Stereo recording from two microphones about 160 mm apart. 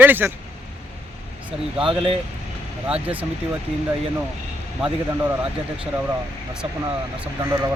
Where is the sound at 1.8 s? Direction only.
35° right (ahead or behind).